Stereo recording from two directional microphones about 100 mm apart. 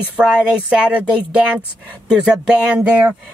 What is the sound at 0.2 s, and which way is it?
Speech, 10° right (ahead or behind).